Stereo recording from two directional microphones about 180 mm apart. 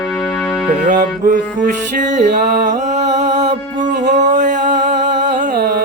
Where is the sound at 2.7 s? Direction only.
40° right (ahead or behind).